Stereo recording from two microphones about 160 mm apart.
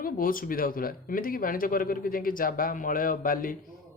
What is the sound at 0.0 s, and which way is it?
Speech, 60° left (ahead or behind).